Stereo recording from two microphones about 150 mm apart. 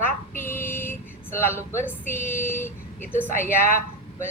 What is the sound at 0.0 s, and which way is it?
Speech, 15° left (ahead or behind).